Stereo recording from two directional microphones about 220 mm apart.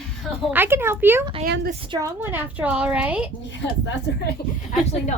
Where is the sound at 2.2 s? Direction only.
10° right (ahead or behind).